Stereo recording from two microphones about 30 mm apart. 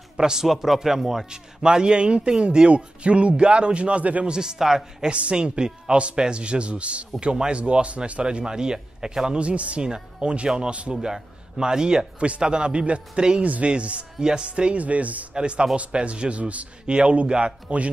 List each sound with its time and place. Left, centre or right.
0.2 s speech: centre
1.6 s speech: right
4.3 s speech: right
5.1 s speech: right
7.2 s speech: right
9.4 s speech: right
9.8 s speech: right
13.4 s speech: right
14.8 s speech: right
15.3 s speech: right
16.8 s speech: right